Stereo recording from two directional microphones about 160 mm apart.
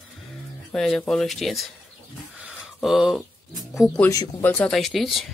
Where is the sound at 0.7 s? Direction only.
5° left (ahead or behind).